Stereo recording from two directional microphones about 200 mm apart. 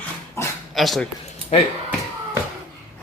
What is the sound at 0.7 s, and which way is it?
Speech, centre (ahead or behind).